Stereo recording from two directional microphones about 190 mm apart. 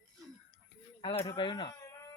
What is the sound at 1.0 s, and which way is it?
Speech, 25° left (ahead or behind).